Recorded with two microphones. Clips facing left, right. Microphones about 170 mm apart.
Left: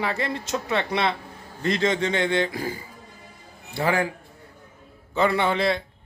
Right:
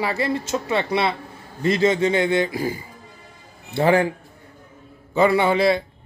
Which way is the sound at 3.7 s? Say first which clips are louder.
Right 6 dB; 25° right (ahead or behind).